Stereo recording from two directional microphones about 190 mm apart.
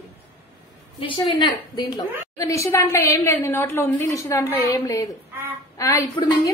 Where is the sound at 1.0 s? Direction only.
30° left (ahead or behind).